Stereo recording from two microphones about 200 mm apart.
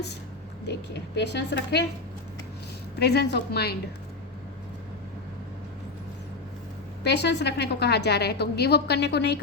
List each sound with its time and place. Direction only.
0.7 s a woman's voice: 55° left (ahead or behind)
3.0 s a woman's voice: 55° left (ahead or behind)
7.0 s a woman's voice: 55° left (ahead or behind)